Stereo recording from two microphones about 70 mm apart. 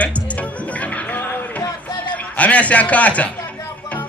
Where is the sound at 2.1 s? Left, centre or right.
Left.